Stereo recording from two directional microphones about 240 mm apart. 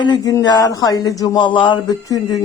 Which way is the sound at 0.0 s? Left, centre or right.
Centre.